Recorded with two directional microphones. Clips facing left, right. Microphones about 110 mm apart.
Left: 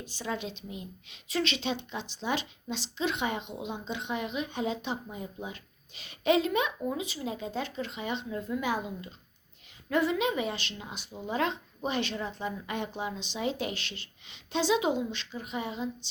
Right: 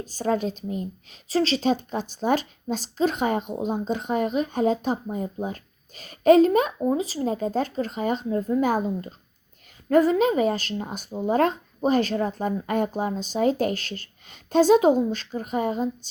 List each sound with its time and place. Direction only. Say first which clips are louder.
0.0 s a woman's voice: right 11 dB; 40° right (ahead or behind)